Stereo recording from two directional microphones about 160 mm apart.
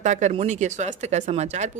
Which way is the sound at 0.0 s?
50° right (ahead or behind).